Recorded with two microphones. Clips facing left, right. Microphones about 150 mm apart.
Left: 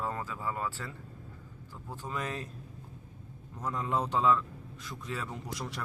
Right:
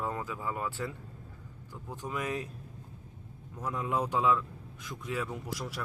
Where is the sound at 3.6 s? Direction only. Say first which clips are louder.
Even; 10° right (ahead or behind).